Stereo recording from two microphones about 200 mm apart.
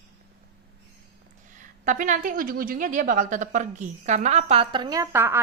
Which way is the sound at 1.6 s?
40° right (ahead or behind).